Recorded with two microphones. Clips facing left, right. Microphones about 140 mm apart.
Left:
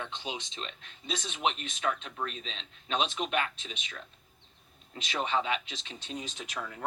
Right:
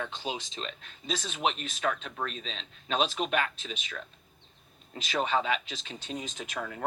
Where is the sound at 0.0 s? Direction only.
40° right (ahead or behind).